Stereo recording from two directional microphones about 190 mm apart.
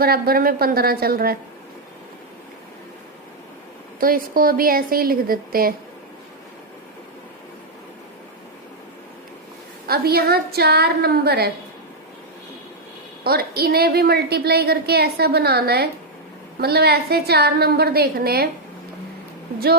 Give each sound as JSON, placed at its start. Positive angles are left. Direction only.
{"t": 0.0, "sound": "a woman's voice", "side_deg": -50}
{"t": 4.0, "sound": "a woman's voice", "side_deg": -50}
{"t": 9.8, "sound": "a woman's voice", "side_deg": -55}
{"t": 13.2, "sound": "a woman's voice", "side_deg": -55}